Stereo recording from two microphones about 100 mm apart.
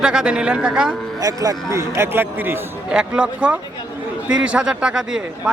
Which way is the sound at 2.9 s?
10° right (ahead or behind).